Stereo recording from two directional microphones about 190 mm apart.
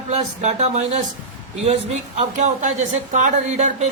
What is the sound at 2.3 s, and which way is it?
Speech, 40° right (ahead or behind).